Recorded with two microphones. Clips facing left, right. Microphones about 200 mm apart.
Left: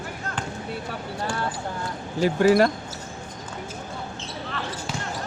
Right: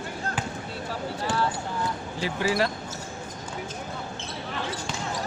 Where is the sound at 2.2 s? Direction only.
50° left (ahead or behind).